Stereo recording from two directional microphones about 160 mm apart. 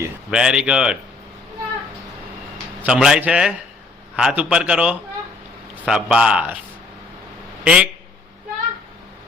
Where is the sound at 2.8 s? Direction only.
5° right (ahead or behind).